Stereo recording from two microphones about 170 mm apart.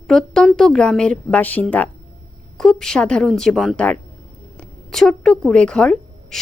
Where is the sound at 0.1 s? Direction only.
Centre (ahead or behind).